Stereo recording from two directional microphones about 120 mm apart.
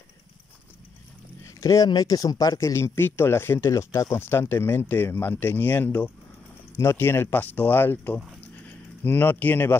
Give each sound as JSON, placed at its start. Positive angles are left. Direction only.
{"t": 1.4, "sound": "rowboat", "side_deg": 25}
{"t": 1.9, "sound": "speech", "side_deg": 30}